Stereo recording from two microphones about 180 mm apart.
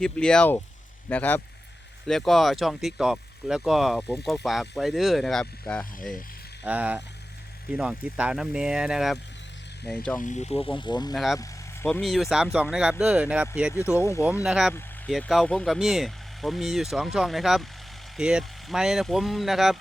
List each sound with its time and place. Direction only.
0.0 s speech: 5° left (ahead or behind)
6.7 s speech: 10° right (ahead or behind)
10.2 s speech: 40° left (ahead or behind); by 11.1 s 25° left (ahead or behind)
11.1 s speech: centre (ahead or behind)
11.3 s speech: 10° left (ahead or behind); by 13.5 s 5° right (ahead or behind)
13.9 s speech: 15° left (ahead or behind)
14.4 s speech: 5° right (ahead or behind)
14.7 s speech: 10° left (ahead or behind)